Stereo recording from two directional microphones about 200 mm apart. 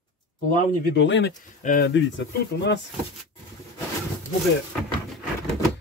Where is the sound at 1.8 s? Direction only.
65° left (ahead or behind).